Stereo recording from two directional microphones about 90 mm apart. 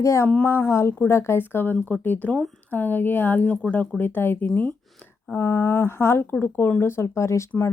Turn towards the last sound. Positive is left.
turn(degrees=30)  # may be behind; listen again after turning